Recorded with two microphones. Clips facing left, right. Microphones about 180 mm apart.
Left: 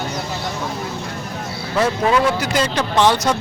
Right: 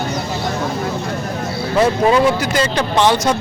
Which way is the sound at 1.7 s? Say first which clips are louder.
Right 3 dB; 25° right (ahead or behind).